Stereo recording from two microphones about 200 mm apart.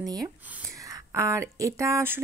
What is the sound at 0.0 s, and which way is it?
Speech, 20° right (ahead or behind).